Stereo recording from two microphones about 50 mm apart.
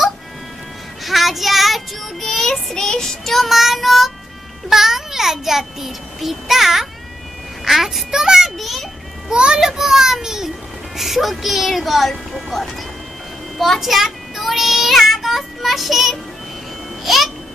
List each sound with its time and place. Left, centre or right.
1.0 s child singing: centre
4.7 s a child's voice: centre
9.3 s a child's voice: centre
13.6 s child singing: centre
17.0 s babbling: centre